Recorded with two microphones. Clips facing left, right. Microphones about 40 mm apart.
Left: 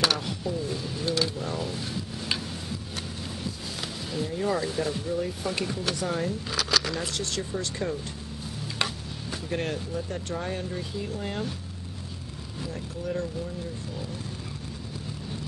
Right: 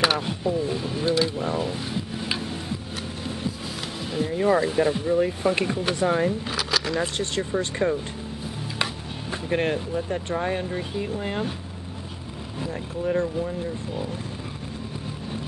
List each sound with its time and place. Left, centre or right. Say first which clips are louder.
0.0 s a sound: right 4 dB; centre
0.4 s speech: right 6 dB; right
1.4 s boat: right 5 dB; right
4.1 s speech: right 7 dB; right
6.5 s a sound: right 2 dB; centre
7.2 s speech: right 5 dB; right
9.3 s speech: right 6 dB; right
12.5 s speech: right 5 dB; right